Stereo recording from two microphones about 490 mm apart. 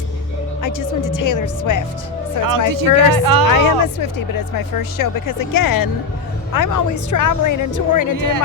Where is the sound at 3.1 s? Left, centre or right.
Right.